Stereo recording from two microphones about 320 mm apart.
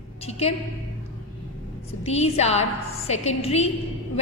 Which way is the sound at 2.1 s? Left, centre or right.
Centre.